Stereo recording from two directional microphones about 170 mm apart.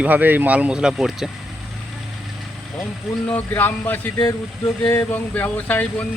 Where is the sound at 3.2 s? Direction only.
10° left (ahead or behind).